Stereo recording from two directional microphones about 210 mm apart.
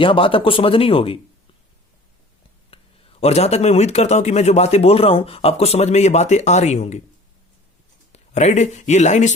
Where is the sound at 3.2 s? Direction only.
30° left (ahead or behind).